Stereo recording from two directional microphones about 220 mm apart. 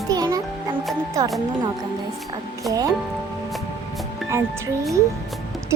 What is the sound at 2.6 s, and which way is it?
Speech, 15° right (ahead or behind).